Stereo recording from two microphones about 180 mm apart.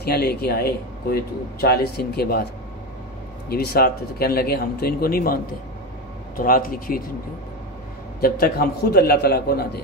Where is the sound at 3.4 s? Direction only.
60° left (ahead or behind).